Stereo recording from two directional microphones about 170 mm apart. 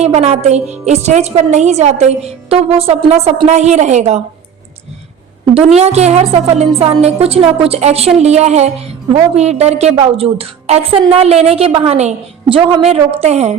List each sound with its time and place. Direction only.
0.0 s a woman's voice: 40° right (ahead or behind)
5.6 s a woman's voice: 40° right (ahead or behind)